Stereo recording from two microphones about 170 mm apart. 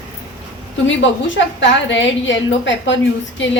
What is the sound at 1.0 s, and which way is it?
A woman's voice, 90° left.